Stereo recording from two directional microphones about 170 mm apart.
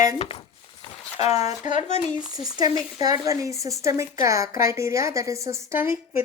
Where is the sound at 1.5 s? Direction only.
45° left (ahead or behind).